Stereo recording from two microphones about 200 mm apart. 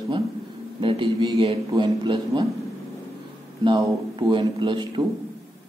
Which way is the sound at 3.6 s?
25° right (ahead or behind).